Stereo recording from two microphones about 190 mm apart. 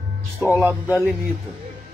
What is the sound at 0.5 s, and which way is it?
Speech, 10° right (ahead or behind).